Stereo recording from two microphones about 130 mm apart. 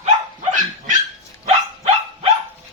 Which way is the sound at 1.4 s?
50° right (ahead or behind).